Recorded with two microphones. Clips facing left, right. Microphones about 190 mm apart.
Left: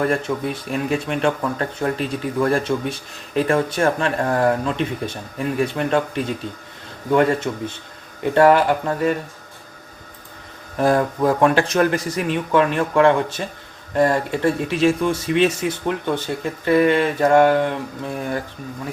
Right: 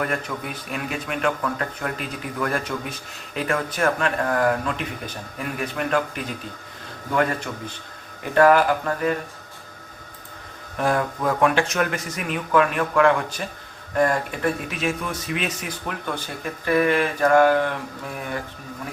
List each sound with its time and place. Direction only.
0.0 s speech: 30° left (ahead or behind)
7.1 s speech: 25° left (ahead or behind)
10.8 s a man's voice: 35° left (ahead or behind)